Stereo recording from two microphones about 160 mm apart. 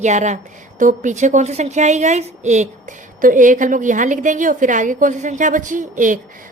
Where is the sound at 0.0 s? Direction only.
50° right (ahead or behind).